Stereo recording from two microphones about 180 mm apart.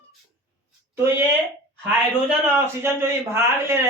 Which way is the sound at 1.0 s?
15° right (ahead or behind).